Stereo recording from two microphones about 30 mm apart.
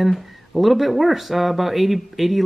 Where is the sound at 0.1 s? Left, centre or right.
Centre.